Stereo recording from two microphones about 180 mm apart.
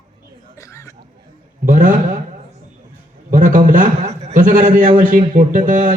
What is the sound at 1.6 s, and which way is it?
Speech, 45° right (ahead or behind).